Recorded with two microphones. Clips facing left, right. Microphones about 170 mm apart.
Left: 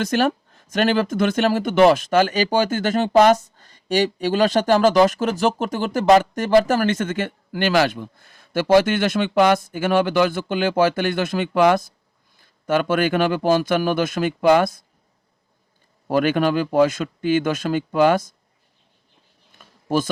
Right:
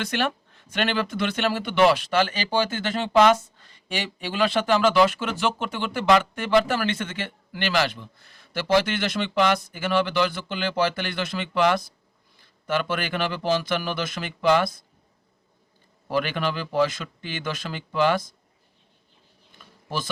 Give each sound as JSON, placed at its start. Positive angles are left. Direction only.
{"t": 0.0, "sound": "speech", "side_deg": 40}
{"t": 16.0, "sound": "speech", "side_deg": 50}
{"t": 19.5, "sound": "a sound", "side_deg": 50}